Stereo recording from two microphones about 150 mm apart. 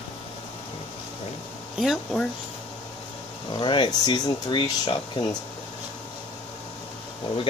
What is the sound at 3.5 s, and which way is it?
Speech, 35° left (ahead or behind).